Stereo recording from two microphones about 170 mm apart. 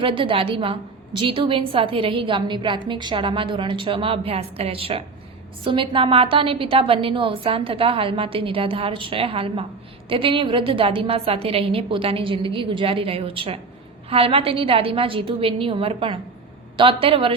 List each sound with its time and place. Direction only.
0.0 s a woman's voice: 30° right (ahead or behind)